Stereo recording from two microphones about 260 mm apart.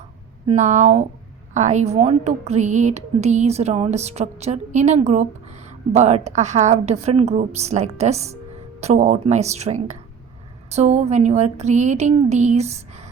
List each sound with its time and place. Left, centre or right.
0.4 s a woman's voice: right